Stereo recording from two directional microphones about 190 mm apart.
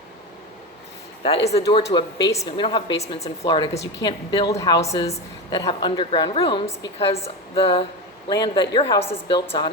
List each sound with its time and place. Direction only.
1.5 s a woman's voice: 30° left (ahead or behind)
4.8 s a woman's voice: 35° left (ahead or behind)
5.1 s a woman's voice: 20° left (ahead or behind)